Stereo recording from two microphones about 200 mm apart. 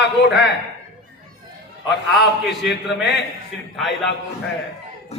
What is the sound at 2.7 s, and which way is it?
Speech, 55° left (ahead or behind).